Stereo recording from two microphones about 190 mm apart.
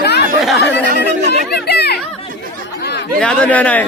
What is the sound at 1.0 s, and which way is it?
Chatter, 60° left (ahead or behind).